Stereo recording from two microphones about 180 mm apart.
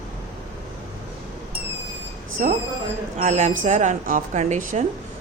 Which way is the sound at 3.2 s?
40° right (ahead or behind).